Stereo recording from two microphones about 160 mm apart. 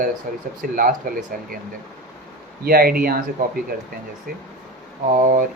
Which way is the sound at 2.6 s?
70° right (ahead or behind).